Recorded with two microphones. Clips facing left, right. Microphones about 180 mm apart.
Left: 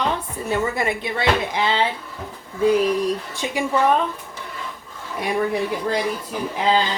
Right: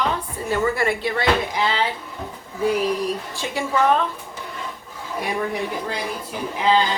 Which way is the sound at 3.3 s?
15° left (ahead or behind).